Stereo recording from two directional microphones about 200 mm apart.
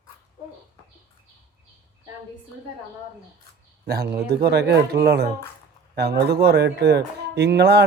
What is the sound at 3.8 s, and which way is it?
Speech, 50° right (ahead or behind).